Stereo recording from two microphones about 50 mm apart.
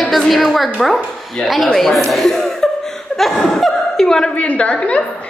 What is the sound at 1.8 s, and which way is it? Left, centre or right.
Chuckle, centre.